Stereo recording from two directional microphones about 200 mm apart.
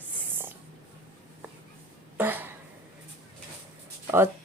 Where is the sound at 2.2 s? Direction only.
10° right (ahead or behind).